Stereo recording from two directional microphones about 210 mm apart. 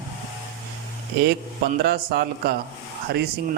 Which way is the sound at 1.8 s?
50° right (ahead or behind).